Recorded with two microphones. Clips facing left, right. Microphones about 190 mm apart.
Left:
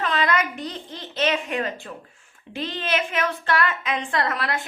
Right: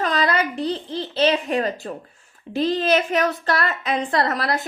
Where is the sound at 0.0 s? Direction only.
40° right (ahead or behind).